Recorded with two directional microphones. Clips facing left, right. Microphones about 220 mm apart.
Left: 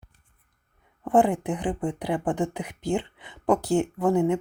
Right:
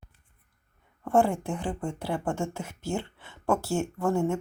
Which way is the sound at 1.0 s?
20° left (ahead or behind).